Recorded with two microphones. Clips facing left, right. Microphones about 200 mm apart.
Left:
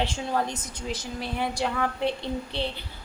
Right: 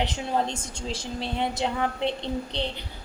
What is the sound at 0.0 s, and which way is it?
A woman's voice, 20° right (ahead or behind).